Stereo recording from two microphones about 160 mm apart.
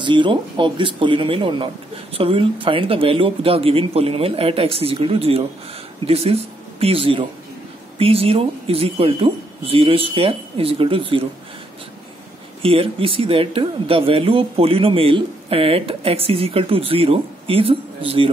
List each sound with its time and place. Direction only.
0.0 s speech: 30° right (ahead or behind)
12.6 s speech: 35° right (ahead or behind)